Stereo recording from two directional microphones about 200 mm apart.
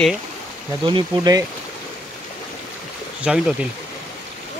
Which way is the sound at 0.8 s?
20° right (ahead or behind).